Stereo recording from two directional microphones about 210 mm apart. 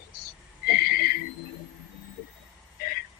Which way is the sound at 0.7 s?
45° left (ahead or behind).